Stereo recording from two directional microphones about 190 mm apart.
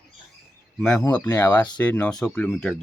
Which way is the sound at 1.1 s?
10° left (ahead or behind).